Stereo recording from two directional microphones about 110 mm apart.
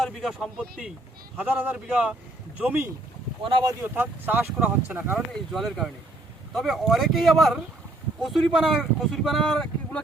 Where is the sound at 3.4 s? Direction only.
50° right (ahead or behind).